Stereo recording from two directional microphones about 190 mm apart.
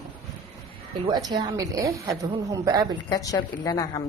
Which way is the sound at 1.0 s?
20° right (ahead or behind).